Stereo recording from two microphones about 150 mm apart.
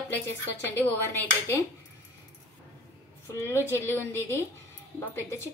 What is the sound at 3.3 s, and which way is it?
Speech, 15° left (ahead or behind).